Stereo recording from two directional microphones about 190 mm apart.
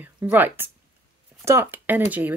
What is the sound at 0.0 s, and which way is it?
Speech, 10° right (ahead or behind).